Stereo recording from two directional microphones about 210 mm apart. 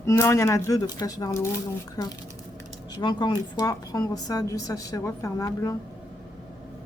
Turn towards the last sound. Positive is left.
turn(degrees=15)  # may be behind; listen again after turning